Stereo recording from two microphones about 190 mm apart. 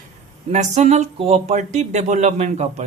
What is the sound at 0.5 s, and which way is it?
Speech, 35° right (ahead or behind).